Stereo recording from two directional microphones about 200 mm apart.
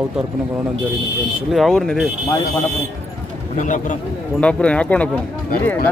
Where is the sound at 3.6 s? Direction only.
40° left (ahead or behind).